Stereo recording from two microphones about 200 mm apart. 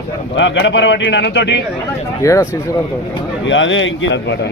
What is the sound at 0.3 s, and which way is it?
A man's voice, 65° left (ahead or behind).